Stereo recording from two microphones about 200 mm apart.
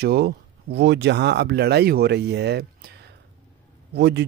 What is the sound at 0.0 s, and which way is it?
Speech, 50° right (ahead or behind).